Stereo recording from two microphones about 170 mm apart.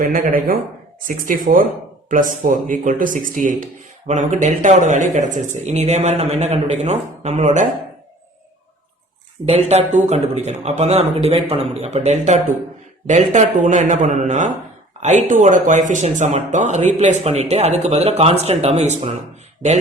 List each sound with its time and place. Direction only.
0.0 s speech: 55° right (ahead or behind)
9.5 s speech: 40° right (ahead or behind)